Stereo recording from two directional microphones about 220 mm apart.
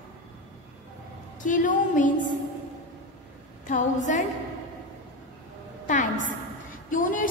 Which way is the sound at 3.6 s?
35° left (ahead or behind).